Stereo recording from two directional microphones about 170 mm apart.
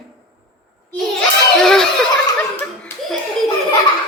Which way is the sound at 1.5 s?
5° left (ahead or behind).